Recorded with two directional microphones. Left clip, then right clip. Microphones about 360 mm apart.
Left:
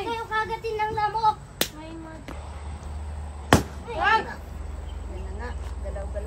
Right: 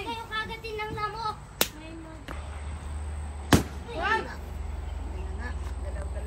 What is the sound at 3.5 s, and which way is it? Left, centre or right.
Chop, centre.